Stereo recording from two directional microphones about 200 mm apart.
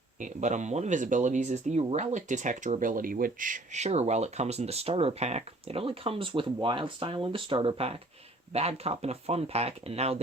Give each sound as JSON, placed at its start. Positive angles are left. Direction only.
{"t": 0.2, "sound": "speech", "side_deg": -35}